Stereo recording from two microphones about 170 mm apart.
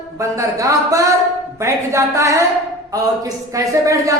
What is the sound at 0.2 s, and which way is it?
Speech, 20° right (ahead or behind).